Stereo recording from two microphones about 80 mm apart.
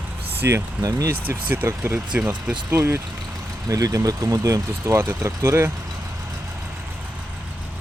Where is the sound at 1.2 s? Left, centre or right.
Right.